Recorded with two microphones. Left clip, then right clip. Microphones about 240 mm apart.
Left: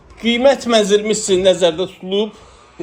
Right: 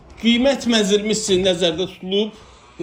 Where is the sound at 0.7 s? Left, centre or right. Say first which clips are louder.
Left 4 dB; left.